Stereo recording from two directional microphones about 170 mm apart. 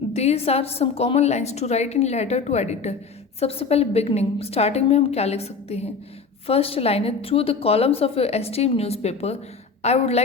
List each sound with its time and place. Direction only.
0.1 s a woman's voice: 40° left (ahead or behind)